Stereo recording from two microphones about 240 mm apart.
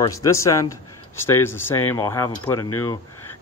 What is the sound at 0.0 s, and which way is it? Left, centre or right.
Speech, centre.